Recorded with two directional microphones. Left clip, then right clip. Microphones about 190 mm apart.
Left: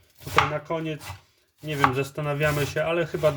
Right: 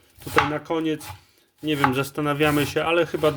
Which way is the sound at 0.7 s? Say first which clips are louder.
Right 5 dB; 35° right (ahead or behind).